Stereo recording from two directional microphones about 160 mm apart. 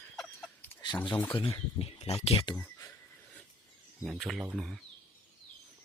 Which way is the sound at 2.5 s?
10° left (ahead or behind).